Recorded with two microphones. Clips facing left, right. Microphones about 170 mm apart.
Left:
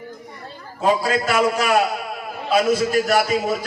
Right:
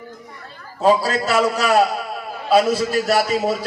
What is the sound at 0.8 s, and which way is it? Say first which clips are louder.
A man's voice: right 2 dB; 35° right (ahead or behind).